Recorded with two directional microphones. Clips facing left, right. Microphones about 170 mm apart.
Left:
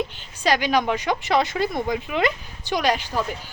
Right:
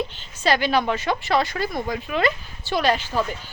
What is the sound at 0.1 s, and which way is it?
A woman's voice, 10° left (ahead or behind).